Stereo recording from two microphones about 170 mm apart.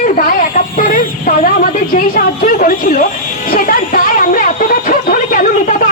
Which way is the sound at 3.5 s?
55° left (ahead or behind).